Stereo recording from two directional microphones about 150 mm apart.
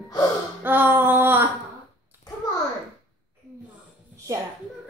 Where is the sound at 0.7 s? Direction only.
15° right (ahead or behind).